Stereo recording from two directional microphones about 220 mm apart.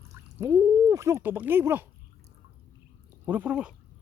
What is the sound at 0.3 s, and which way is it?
Speech, 15° right (ahead or behind).